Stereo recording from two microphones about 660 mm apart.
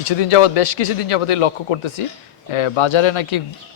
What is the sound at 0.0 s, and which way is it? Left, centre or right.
Speech, left.